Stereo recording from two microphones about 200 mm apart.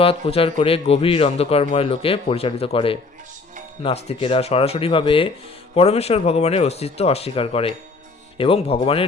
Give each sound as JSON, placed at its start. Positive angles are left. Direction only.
{"t": 0.0, "sound": "a man's voice", "side_deg": 30}